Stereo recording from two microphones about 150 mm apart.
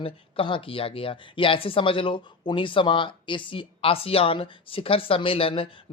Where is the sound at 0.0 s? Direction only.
35° left (ahead or behind).